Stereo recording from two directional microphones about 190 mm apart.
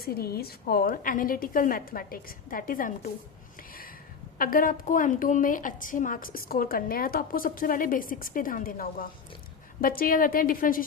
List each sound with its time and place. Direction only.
0.0 s a woman's voice: 55° left (ahead or behind)
4.4 s a woman's voice: 50° left (ahead or behind)